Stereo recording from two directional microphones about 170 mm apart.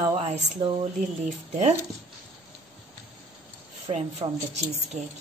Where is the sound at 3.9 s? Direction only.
30° right (ahead or behind).